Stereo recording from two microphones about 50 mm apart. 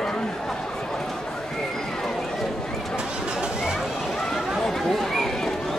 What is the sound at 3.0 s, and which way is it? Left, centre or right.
Speech, centre.